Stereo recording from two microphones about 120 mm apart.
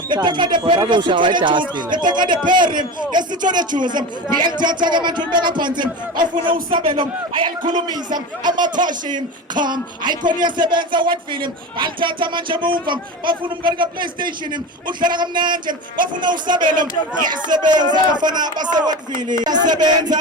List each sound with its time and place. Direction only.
0.1 s speech: 40° right (ahead or behind)